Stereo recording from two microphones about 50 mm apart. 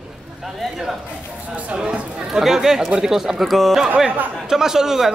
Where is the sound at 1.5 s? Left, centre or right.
Right.